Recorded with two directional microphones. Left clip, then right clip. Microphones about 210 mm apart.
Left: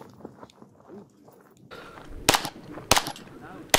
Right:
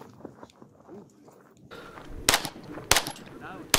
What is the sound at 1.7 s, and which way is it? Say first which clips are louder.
Machine gun: left 1 dB; centre (ahead or behind).